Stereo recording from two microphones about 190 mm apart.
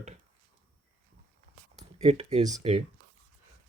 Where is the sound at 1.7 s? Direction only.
35° right (ahead or behind).